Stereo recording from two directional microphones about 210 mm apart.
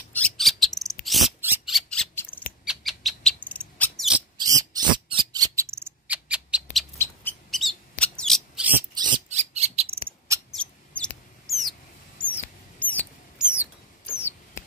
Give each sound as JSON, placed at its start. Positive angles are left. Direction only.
{"t": 0.1, "sound": "bird", "side_deg": 5}
{"t": 1.0, "sound": "a sound", "side_deg": 0}
{"t": 2.6, "sound": "bird", "side_deg": 0}
{"t": 4.4, "sound": "a sound", "side_deg": -15}
{"t": 7.5, "sound": "mouse", "side_deg": 0}
{"t": 8.0, "sound": "a sound", "side_deg": 5}
{"t": 8.9, "sound": "rodents", "side_deg": -20}
{"t": 9.3, "sound": "bird", "side_deg": -30}
{"t": 10.5, "sound": "mouse", "side_deg": 5}
{"t": 13.4, "sound": "bird", "side_deg": -5}
{"t": 14.0, "sound": "mouse", "side_deg": 10}